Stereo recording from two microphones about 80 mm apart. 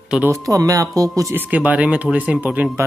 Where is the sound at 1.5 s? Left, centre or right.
Centre.